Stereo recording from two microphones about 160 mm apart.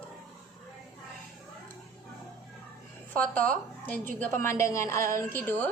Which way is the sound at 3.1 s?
10° left (ahead or behind).